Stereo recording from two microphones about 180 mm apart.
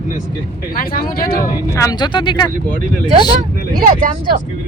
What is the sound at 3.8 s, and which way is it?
Speech, 50° right (ahead or behind).